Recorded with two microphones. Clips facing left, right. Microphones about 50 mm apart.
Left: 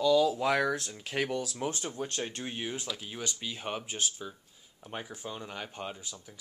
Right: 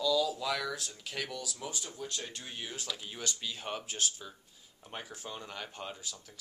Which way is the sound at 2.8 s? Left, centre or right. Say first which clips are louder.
Left 2 dB; centre.